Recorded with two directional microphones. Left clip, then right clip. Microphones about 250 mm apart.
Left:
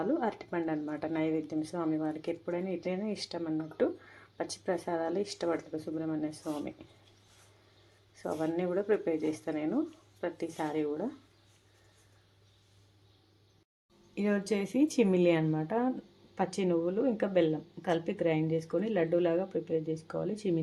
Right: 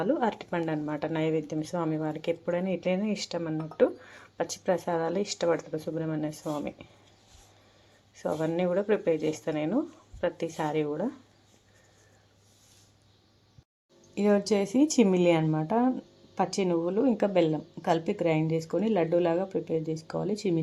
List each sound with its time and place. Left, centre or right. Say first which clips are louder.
0.0 s speech: right 4 dB; centre
8.1 s speech: right 4 dB; centre
14.2 s speech: right 7 dB; centre